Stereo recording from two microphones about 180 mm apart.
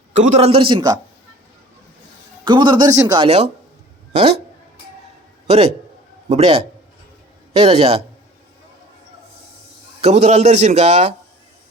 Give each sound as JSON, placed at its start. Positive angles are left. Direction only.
{"t": 0.1, "sound": "a man's voice", "side_deg": -40}
{"t": 2.4, "sound": "speech", "side_deg": -25}
{"t": 5.5, "sound": "a man's voice", "side_deg": -35}
{"t": 10.0, "sound": "a man's voice", "side_deg": -40}